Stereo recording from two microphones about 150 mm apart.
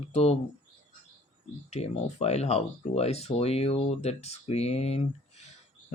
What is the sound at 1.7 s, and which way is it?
Speech, 45° left (ahead or behind).